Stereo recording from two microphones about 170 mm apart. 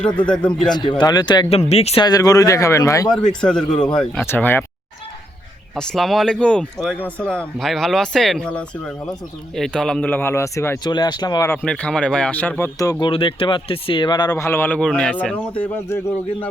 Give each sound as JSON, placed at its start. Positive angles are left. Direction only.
{"t": 0.0, "sound": "speech", "side_deg": 5}
{"t": 0.7, "sound": "a man's voice", "side_deg": 25}
{"t": 1.5, "sound": "speech", "side_deg": 40}
{"t": 2.0, "sound": "a man's voice", "side_deg": 20}
{"t": 3.1, "sound": "speech", "side_deg": 5}
{"t": 5.7, "sound": "speech", "side_deg": 5}